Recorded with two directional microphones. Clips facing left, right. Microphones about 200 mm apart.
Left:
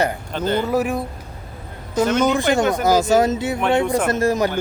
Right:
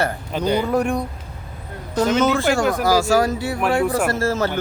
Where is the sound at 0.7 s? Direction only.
5° left (ahead or behind).